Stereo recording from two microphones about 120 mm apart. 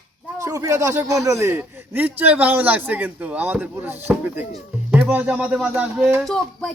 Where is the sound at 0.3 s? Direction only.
25° right (ahead or behind); by 6.1 s 10° right (ahead or behind).